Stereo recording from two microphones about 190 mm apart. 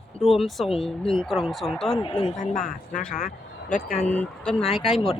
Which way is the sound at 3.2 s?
40° left (ahead or behind).